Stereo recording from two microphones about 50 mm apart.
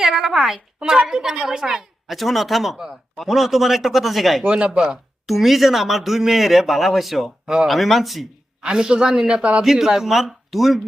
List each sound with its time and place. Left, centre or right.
0.0 s a woman's voice: centre
4.4 s a woman's voice: right
5.2 s speech: centre
8.6 s a woman's voice: centre
9.6 s speech: centre